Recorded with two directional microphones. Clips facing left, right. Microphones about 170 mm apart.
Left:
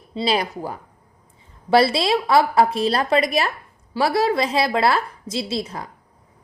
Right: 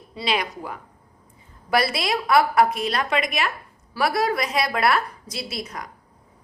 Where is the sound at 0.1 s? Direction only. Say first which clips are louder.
Left 4 dB; 30° left (ahead or behind).